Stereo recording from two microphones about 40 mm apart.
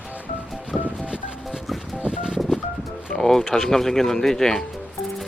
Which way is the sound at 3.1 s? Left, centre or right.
Centre.